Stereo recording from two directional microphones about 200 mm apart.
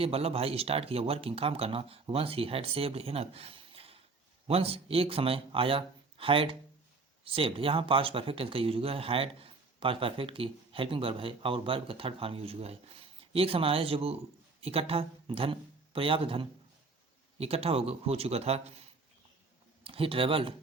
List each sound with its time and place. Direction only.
0.0 s speech: 30° right (ahead or behind)
19.8 s speech: 25° right (ahead or behind)